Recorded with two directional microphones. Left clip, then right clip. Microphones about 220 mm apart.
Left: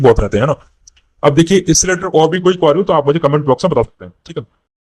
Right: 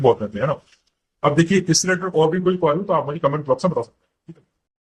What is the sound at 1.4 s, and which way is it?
A man's voice, 45° left (ahead or behind).